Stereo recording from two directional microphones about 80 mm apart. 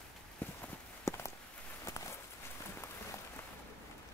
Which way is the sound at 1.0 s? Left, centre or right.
Left.